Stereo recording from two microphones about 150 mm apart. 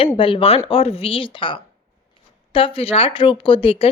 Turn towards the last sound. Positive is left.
turn(degrees=40)  # may be behind; listen again after turning